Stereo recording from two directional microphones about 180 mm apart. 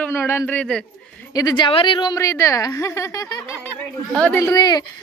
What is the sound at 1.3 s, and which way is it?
A woman's voice, 20° left (ahead or behind).